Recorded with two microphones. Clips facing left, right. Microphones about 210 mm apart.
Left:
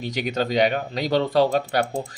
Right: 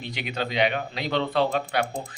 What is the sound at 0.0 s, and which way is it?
Speech, 40° left (ahead or behind).